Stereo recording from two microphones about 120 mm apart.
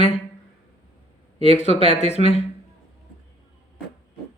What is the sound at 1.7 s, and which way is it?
Speech, 50° right (ahead or behind).